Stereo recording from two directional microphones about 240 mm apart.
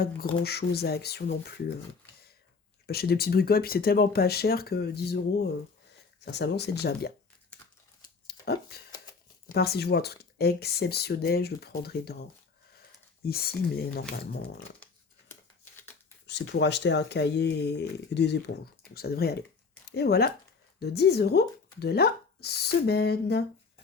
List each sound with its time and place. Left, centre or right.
0.0 s speech: left
2.8 s speech: left
8.3 s a sound: left
9.5 s speech: left
13.2 s speech: left
16.2 s speech: left